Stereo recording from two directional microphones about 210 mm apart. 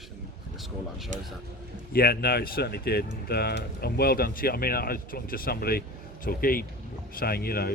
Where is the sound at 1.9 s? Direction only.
45° left (ahead or behind).